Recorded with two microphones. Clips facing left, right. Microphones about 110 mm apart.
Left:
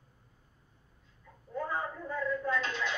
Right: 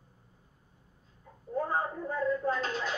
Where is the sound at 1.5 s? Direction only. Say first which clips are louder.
Right 4 dB; 40° right (ahead or behind).